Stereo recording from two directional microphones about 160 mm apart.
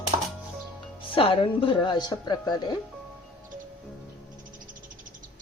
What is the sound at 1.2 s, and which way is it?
Speech, 35° left (ahead or behind).